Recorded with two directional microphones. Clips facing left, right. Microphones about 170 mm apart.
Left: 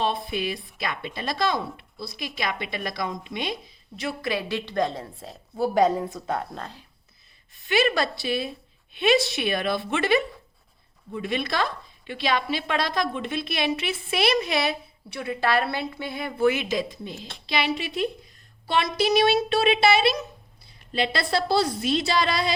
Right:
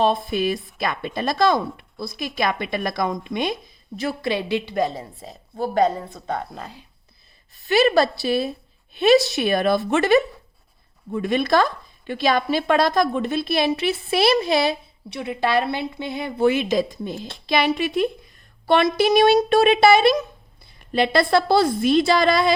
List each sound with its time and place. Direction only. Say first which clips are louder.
0.0 s speech: right 6 dB; 40° right (ahead or behind); by 6.6 s 5° left (ahead or behind)
6.6 s speech: right 1 dB; 10° right (ahead or behind)
7.5 s a woman's voice: right 6 dB; 40° right (ahead or behind)
15.1 s a woman's voice: right 3 dB; 20° right (ahead or behind); by 22.5 s 50° right (ahead or behind)